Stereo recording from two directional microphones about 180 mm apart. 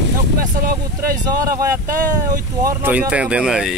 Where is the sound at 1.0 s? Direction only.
20° right (ahead or behind).